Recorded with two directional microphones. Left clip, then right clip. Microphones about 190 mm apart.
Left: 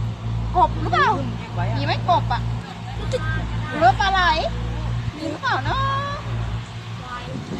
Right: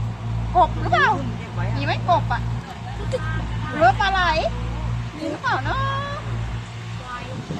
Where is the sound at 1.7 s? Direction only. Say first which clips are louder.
Even; 15° right (ahead or behind).